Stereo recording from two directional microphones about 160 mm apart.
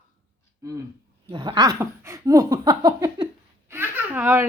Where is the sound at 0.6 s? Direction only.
20° right (ahead or behind).